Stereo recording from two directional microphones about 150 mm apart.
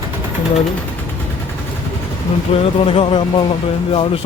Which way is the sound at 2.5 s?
40° left (ahead or behind).